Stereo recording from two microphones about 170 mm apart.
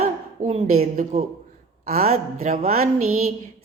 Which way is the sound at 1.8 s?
60° right (ahead or behind).